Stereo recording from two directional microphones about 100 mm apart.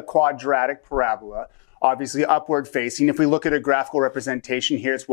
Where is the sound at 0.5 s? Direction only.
10° left (ahead or behind).